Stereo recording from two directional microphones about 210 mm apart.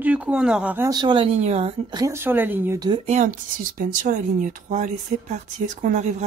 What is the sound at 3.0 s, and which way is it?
Speech, 35° right (ahead or behind).